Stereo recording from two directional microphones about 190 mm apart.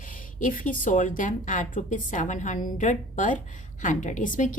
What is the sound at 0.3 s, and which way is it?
A woman's voice, 45° left (ahead or behind).